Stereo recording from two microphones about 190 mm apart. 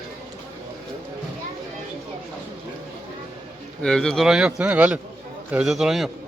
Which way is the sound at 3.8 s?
5° left (ahead or behind).